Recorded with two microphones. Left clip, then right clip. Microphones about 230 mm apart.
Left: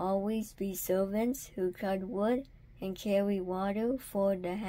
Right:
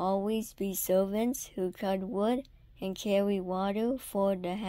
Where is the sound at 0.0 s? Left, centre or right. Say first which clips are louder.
Right 2 dB; right.